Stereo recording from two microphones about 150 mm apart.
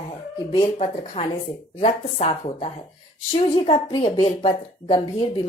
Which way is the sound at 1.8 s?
45° left (ahead or behind).